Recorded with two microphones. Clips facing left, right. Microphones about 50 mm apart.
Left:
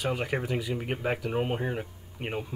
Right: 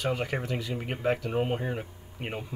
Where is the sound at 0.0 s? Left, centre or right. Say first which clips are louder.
Even; centre.